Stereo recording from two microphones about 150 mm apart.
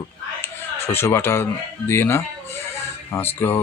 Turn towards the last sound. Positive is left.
turn(degrees=15)  # may be behind; listen again after turning